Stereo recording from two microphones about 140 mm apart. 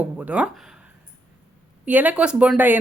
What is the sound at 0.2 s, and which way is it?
Speech, 10° right (ahead or behind).